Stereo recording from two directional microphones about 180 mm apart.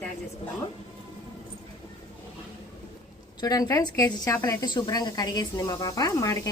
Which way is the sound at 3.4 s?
20° left (ahead or behind).